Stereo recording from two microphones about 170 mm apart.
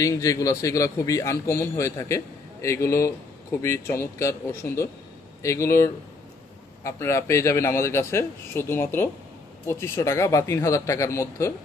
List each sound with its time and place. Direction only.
0.0 s a man's voice: 20° left (ahead or behind)